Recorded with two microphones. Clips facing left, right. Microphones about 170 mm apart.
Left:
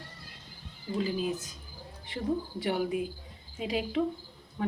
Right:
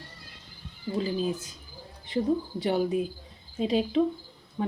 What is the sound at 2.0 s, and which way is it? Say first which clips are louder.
Speech: right 5 dB; 25° right (ahead or behind).